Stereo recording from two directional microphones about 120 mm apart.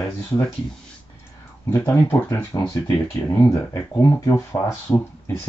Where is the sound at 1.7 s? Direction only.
20° left (ahead or behind).